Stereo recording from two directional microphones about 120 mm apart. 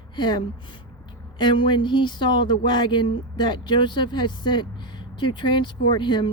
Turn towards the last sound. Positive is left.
turn(degrees=40)  # may be behind; listen again after turning